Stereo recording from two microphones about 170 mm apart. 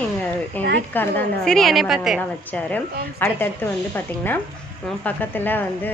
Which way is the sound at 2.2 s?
10° left (ahead or behind).